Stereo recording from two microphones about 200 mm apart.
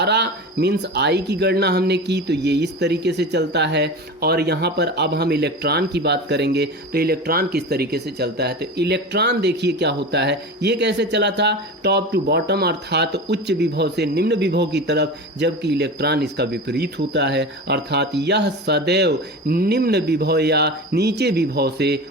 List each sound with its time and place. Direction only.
0.0 s speech: 55° right (ahead or behind)